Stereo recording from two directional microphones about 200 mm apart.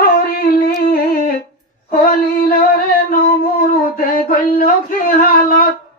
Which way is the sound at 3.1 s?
45° left (ahead or behind).